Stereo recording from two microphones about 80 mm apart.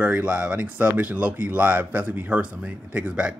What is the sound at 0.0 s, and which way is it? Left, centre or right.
Speech, centre.